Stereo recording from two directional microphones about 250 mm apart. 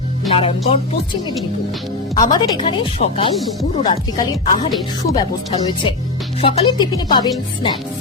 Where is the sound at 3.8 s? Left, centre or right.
Centre.